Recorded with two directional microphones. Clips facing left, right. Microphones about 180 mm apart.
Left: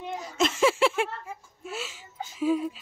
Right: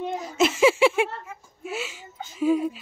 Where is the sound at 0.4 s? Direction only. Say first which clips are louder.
Right 4 dB; 5° right (ahead or behind).